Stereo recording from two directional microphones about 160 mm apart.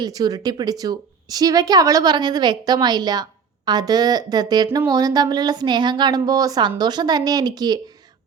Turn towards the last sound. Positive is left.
turn(degrees=-25)  # may be behind; listen again after turning